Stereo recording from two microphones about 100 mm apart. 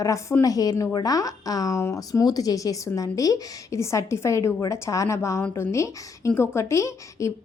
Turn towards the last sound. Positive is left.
turn(degrees=30)  # may be behind; listen again after turning